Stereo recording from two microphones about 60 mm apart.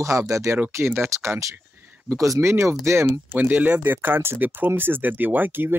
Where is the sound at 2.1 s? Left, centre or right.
Right.